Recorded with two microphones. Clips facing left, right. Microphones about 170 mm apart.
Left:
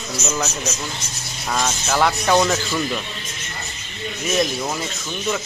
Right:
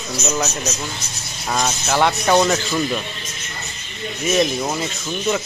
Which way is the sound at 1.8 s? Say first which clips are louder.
Right 1 dB; centre (ahead or behind).